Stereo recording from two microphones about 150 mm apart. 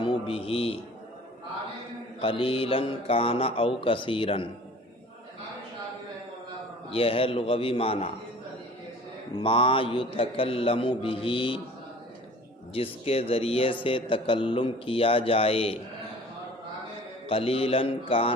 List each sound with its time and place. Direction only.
0.0 s a man's voice: 35° left (ahead or behind)
2.2 s a man's voice: 35° left (ahead or behind)
6.9 s a man's voice: 40° left (ahead or behind)
9.4 s a man's voice: 35° left (ahead or behind)
12.7 s a man's voice: 40° left (ahead or behind)
17.2 s a man's voice: 40° left (ahead or behind)